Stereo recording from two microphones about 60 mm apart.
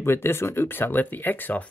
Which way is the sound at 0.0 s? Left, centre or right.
Left.